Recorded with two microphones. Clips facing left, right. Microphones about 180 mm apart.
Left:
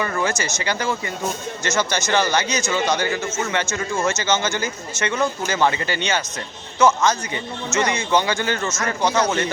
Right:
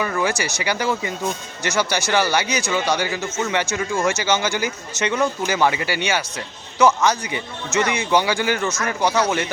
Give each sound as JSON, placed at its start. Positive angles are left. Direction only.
{"t": 0.0, "sound": "speech", "side_deg": -10}